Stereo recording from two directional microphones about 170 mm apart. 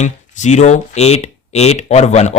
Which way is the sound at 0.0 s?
45° left (ahead or behind).